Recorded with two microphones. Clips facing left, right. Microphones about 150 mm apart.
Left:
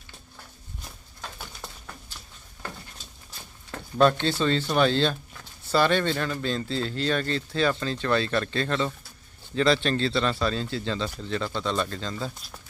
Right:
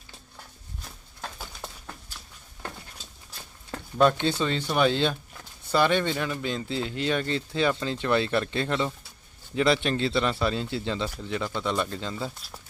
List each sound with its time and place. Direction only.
4.0 s speech: 15° right (ahead or behind)